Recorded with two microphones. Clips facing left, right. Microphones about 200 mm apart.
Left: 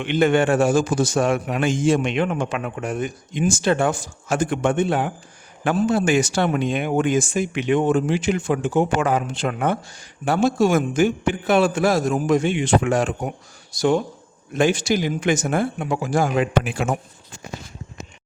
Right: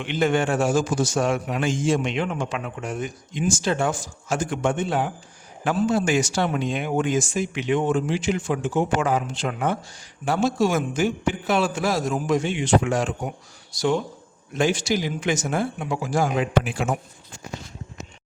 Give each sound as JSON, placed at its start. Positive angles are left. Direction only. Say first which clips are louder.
{"t": 0.0, "sound": "a man's voice", "louder": "left 4 dB", "side_deg": 60}